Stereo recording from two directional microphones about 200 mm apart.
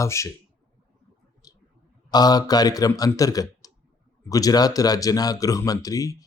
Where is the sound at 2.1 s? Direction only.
20° left (ahead or behind).